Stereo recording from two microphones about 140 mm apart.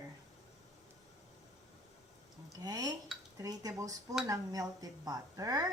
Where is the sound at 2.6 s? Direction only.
25° right (ahead or behind).